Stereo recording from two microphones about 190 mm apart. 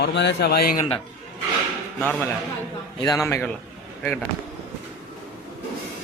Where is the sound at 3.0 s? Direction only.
15° left (ahead or behind).